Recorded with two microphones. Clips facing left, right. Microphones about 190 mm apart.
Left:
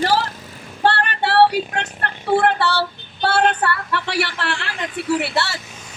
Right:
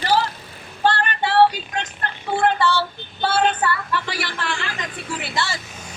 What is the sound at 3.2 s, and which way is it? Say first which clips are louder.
A woman's voice: left 2 dB; 65° left (ahead or behind).